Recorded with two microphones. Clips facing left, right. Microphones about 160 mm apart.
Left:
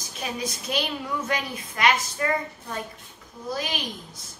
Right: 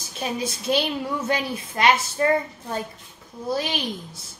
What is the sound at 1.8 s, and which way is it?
Speech, 30° right (ahead or behind).